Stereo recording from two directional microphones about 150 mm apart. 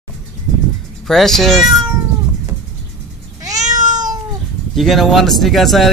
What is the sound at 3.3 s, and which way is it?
Cat, 25° right (ahead or behind).